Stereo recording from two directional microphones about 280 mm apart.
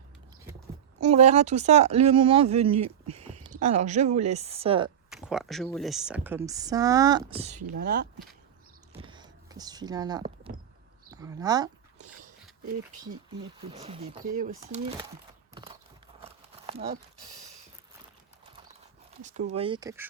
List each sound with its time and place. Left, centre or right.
1.0 s speech: right
5.1 s speech: centre; by 8.0 s right
9.0 s a sound: centre
11.1 s speech: centre
13.6 s speech: centre
15.5 s a sound: centre
19.2 s speech: right